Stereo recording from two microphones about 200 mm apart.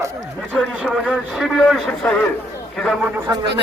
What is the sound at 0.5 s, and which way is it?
A man's voice, 5° left (ahead or behind).